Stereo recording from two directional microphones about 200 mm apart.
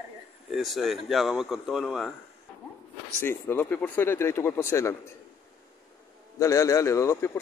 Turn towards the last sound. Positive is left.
turn(degrees=15)  # may be behind; listen again after turning